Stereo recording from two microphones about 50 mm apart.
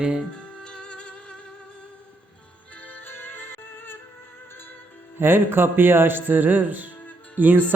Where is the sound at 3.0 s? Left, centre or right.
Left.